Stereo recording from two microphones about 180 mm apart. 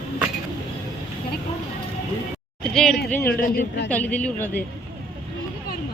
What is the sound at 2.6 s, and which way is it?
A man's voice, centre (ahead or behind).